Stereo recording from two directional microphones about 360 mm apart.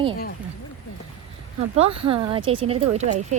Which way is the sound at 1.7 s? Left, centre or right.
Centre.